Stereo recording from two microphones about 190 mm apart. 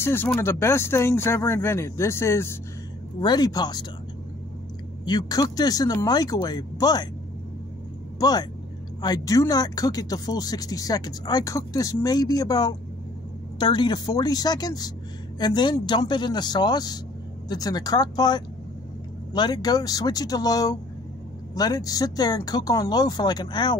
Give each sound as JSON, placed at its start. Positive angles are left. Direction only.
{"t": 0.0, "sound": "speech", "side_deg": 10}
{"t": 5.0, "sound": "speech", "side_deg": 20}
{"t": 8.2, "sound": "speech", "side_deg": 20}